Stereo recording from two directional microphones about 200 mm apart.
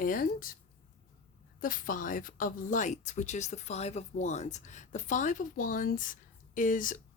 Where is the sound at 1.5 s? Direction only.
45° left (ahead or behind).